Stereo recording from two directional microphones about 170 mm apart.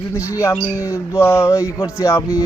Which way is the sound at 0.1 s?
15° left (ahead or behind).